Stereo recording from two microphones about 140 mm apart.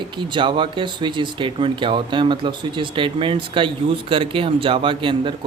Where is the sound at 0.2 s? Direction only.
35° right (ahead or behind).